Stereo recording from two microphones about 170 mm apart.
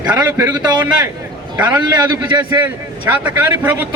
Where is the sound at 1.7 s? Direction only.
25° right (ahead or behind).